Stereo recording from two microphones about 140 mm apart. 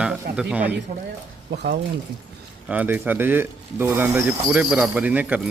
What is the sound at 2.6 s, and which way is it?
Speech, 10° right (ahead or behind).